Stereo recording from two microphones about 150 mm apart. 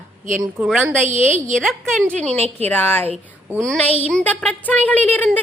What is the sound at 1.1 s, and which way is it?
Speech, 55° right (ahead or behind).